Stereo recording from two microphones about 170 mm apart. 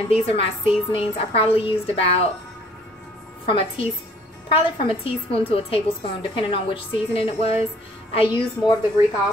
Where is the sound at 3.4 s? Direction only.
35° left (ahead or behind).